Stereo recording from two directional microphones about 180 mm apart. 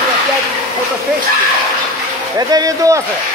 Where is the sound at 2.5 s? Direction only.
20° right (ahead or behind).